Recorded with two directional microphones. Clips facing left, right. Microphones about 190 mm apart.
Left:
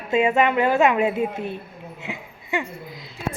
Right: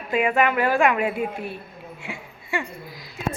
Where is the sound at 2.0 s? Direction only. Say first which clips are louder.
Left 4 dB; 20° left (ahead or behind).